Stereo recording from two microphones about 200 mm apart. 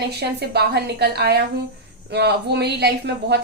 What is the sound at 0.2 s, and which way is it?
Speech, 55° right (ahead or behind).